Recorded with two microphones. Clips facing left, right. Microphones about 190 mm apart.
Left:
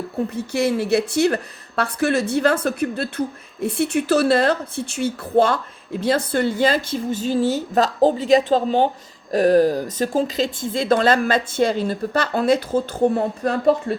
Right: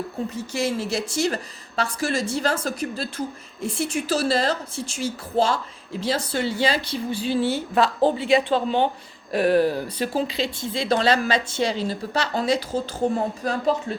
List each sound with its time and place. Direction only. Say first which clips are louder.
0.3 s speech: left 5 dB; 60° left (ahead or behind)